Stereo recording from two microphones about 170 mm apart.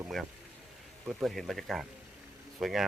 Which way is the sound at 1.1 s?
Centre (ahead or behind).